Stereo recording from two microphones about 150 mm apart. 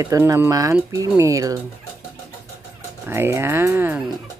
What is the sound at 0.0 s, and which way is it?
Speech, 20° right (ahead or behind).